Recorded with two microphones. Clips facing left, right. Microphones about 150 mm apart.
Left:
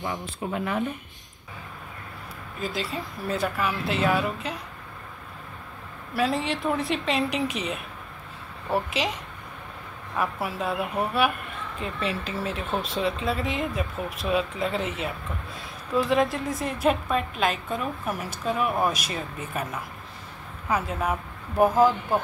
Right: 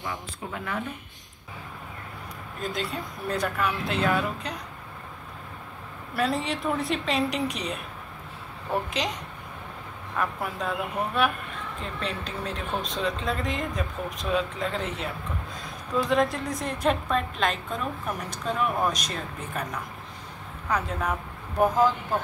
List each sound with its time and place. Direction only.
0.5 s speech: 20° left (ahead or behind)
2.6 s a woman's voice: 5° left (ahead or behind)
6.1 s a woman's voice: centre (ahead or behind)